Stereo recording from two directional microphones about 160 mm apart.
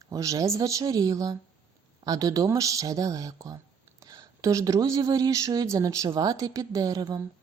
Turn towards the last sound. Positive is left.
turn(degrees=-25)  # may be behind; listen again after turning